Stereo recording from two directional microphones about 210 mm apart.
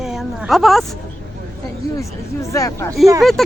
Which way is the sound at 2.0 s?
15° left (ahead or behind).